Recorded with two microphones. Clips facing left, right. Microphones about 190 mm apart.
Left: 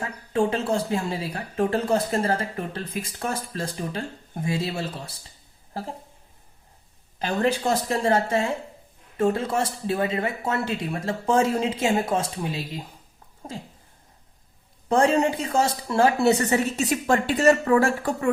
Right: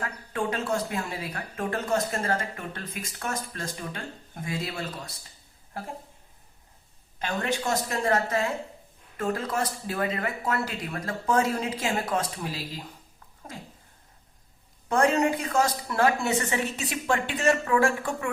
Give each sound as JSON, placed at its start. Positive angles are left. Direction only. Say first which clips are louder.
{"t": 0.0, "sound": "speech", "louder": "left 6 dB", "side_deg": 25}
{"t": 7.2, "sound": "speech", "louder": "left 6 dB", "side_deg": 35}
{"t": 14.8, "sound": "speech", "louder": "left 3 dB", "side_deg": 30}